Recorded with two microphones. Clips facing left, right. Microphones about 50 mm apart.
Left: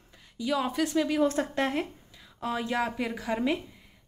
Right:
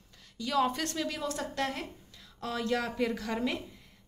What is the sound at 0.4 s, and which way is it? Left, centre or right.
Speech, centre.